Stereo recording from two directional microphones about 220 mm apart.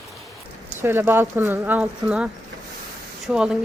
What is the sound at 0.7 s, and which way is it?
Speech, 10° right (ahead or behind).